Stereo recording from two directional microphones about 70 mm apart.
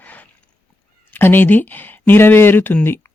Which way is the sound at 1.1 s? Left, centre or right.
Left.